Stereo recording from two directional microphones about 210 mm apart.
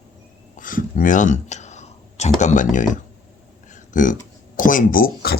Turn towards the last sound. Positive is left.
turn(degrees=45)  # may be behind; listen again after turning